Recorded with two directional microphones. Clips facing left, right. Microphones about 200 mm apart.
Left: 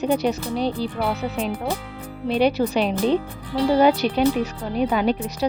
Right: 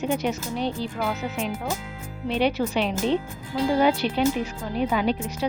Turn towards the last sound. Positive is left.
turn(degrees=45)  # may be behind; listen again after turning